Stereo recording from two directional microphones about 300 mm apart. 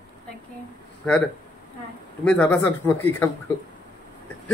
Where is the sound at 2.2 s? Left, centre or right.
Centre.